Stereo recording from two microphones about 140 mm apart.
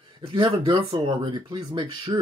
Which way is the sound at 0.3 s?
35° right (ahead or behind).